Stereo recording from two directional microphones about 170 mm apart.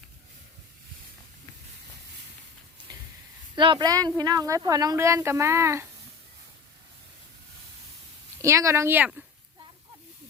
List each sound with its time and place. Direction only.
3.5 s speech: 25° right (ahead or behind)
8.4 s speech: 20° right (ahead or behind)